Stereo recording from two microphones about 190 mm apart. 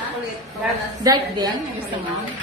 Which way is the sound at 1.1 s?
20° right (ahead or behind).